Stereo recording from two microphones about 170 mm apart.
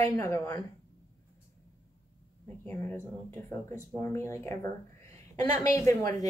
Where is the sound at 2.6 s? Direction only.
15° left (ahead or behind).